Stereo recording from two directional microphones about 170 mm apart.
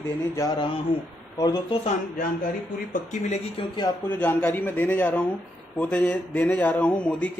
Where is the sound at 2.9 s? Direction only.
45° left (ahead or behind).